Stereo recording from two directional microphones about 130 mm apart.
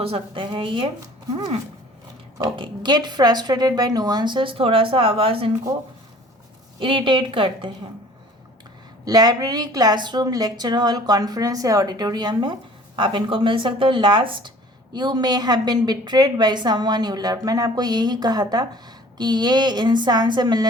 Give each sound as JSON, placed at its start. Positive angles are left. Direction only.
{"t": 0.0, "sound": "a woman's voice", "side_deg": -45}
{"t": 2.4, "sound": "a woman's voice", "side_deg": -35}
{"t": 6.7, "sound": "a woman's voice", "side_deg": -40}
{"t": 9.0, "sound": "a woman's voice", "side_deg": -30}